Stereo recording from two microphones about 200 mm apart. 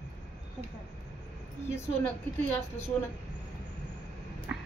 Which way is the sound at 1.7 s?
10° left (ahead or behind).